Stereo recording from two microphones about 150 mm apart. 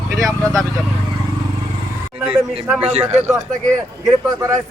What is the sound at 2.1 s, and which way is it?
Speech, 5° right (ahead or behind).